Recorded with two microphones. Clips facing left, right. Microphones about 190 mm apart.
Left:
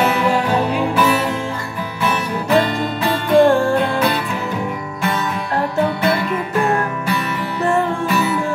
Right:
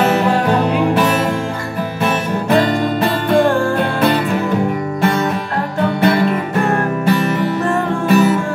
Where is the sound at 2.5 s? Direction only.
40° right (ahead or behind).